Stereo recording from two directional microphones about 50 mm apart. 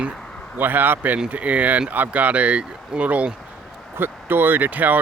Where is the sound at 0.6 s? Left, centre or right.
Right.